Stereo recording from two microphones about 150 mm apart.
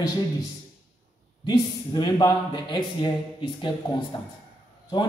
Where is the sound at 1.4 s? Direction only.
25° left (ahead or behind).